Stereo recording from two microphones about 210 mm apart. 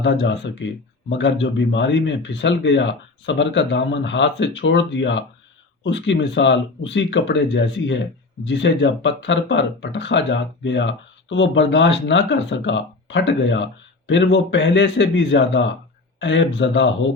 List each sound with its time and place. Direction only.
0.0 s speech: 60° left (ahead or behind)